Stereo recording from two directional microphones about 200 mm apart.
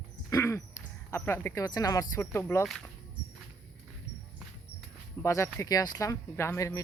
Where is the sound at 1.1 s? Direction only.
15° left (ahead or behind).